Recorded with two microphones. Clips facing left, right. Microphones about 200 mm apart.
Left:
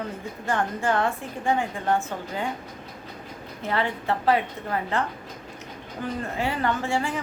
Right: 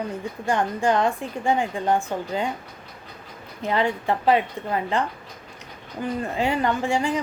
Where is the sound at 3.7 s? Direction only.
15° right (ahead or behind).